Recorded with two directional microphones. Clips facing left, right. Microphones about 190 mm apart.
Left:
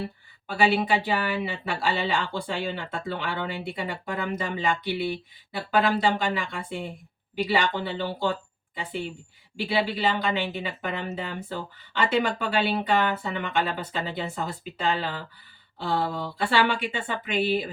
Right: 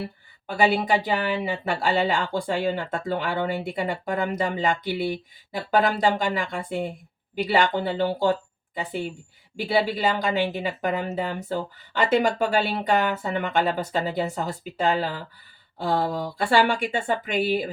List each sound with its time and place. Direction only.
0.4 s speech: 45° right (ahead or behind)